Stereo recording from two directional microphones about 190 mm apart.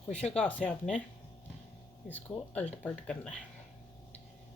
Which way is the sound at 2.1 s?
10° left (ahead or behind).